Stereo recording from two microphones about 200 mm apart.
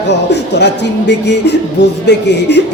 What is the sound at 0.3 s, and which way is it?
A man's voice, 60° left (ahead or behind).